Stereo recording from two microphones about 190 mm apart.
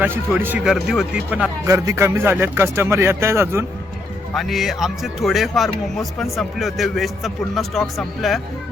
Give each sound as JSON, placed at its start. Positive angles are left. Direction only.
{"t": 0.0, "sound": "a man's voice", "side_deg": -10}
{"t": 4.4, "sound": "speech", "side_deg": 0}